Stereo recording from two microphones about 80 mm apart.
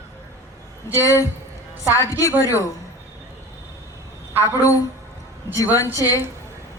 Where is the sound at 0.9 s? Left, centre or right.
Left.